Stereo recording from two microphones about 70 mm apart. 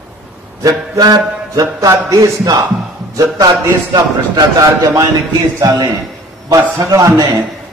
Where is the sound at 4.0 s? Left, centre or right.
Right.